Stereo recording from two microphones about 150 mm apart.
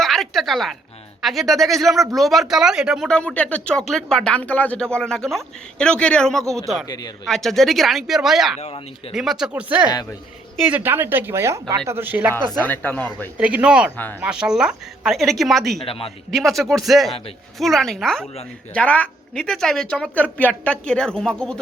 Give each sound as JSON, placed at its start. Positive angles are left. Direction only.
{"t": 0.0, "sound": "speech", "side_deg": 0}
{"t": 6.8, "sound": "speech", "side_deg": 25}
{"t": 7.3, "sound": "speech", "side_deg": 0}
{"t": 8.5, "sound": "speech", "side_deg": 45}
{"t": 9.1, "sound": "speech", "side_deg": -5}
{"t": 9.9, "sound": "speech", "side_deg": 25}
{"t": 10.7, "sound": "speech", "side_deg": -10}
{"t": 12.6, "sound": "speech", "side_deg": 10}
{"t": 13.3, "sound": "speech", "side_deg": -10}
{"t": 13.9, "sound": "speech", "side_deg": 10}
{"t": 14.2, "sound": "speech", "side_deg": -5}
{"t": 15.9, "sound": "speech", "side_deg": 40}
{"t": 16.3, "sound": "speech", "side_deg": 0}